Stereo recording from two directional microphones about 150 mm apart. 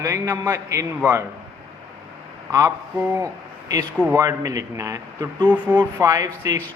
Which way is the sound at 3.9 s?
10° right (ahead or behind).